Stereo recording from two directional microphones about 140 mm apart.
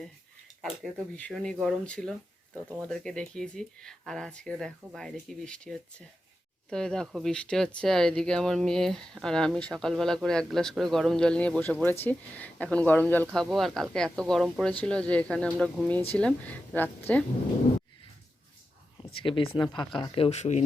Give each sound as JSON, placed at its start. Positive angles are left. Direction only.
{"t": 0.6, "sound": "speech", "side_deg": 0}
{"t": 13.3, "sound": "speech", "side_deg": 0}
{"t": 14.7, "sound": "speech", "side_deg": 10}
{"t": 19.2, "sound": "speech", "side_deg": 35}